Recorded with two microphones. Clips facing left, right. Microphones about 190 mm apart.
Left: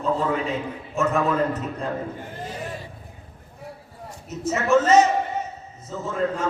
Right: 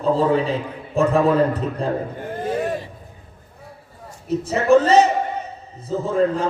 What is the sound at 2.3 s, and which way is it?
Vehicle, 55° right (ahead or behind).